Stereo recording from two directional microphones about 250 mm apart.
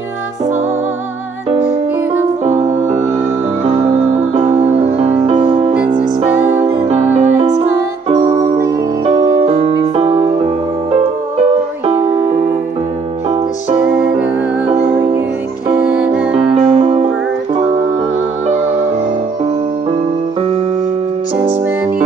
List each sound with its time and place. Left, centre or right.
2.4 s music: right
13.7 s music: right
15.9 s music: centre
16.3 s music: right